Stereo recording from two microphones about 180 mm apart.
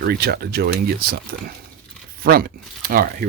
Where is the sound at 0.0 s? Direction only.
60° right (ahead or behind).